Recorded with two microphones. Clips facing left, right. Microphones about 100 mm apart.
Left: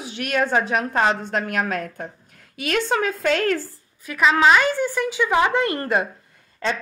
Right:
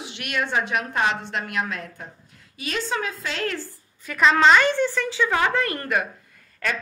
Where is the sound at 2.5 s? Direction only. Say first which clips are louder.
Left 5 dB; 60° left (ahead or behind).